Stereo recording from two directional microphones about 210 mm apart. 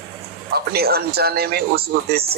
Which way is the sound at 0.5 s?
50° right (ahead or behind).